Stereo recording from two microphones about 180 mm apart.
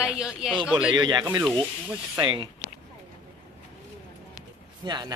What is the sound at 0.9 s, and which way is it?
Speech, 25° right (ahead or behind).